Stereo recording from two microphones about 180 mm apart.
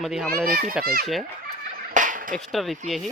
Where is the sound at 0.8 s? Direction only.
55° right (ahead or behind).